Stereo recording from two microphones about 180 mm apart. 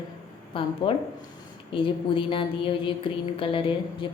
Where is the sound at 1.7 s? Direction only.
30° left (ahead or behind).